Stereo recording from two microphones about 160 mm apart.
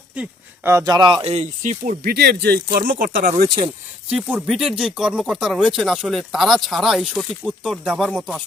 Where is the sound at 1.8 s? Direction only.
55° right (ahead or behind).